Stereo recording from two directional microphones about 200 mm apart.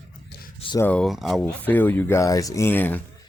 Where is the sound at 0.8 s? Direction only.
5° left (ahead or behind).